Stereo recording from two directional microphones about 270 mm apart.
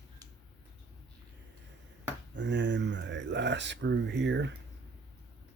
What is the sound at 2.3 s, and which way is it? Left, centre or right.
Speech, right.